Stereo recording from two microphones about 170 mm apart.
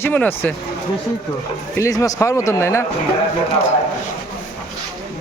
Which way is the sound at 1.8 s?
20° left (ahead or behind).